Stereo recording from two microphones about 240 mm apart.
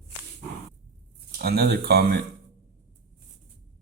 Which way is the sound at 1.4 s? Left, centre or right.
Right.